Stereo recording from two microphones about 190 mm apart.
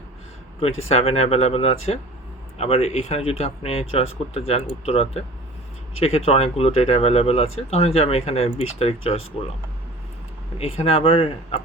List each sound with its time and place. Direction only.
0.9 s speech: 30° left (ahead or behind)
10.6 s speech: 30° left (ahead or behind)